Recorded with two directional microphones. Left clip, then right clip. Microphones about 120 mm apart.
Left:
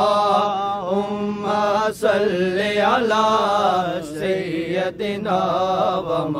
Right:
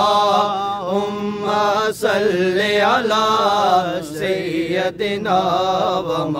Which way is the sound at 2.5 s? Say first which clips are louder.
Right 3 dB; 40° right (ahead or behind).